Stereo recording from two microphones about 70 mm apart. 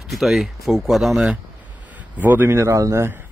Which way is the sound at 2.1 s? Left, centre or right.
Right.